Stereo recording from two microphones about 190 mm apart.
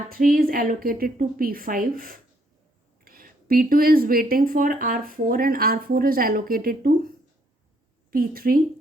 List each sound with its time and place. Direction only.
0.1 s a woman's voice: 50° right (ahead or behind)
8.1 s a woman's voice: 50° right (ahead or behind)